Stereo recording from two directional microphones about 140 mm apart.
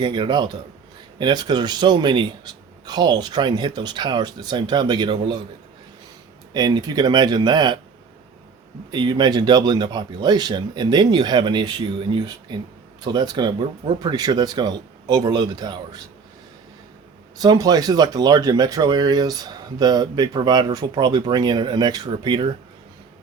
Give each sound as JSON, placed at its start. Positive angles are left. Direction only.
{"t": 0.0, "sound": "a man's voice", "side_deg": -35}
{"t": 6.5, "sound": "a man's voice", "side_deg": -30}
{"t": 8.9, "sound": "a man's voice", "side_deg": -35}
{"t": 17.4, "sound": "speech", "side_deg": -30}